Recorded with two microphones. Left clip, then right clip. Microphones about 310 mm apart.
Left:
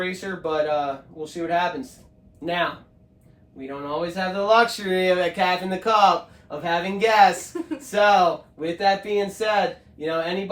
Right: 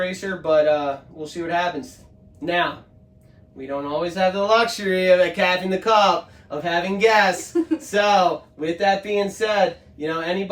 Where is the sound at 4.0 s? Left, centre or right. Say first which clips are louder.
Right 5 dB; centre.